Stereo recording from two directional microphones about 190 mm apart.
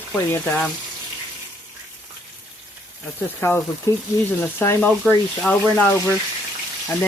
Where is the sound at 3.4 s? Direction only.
15° left (ahead or behind).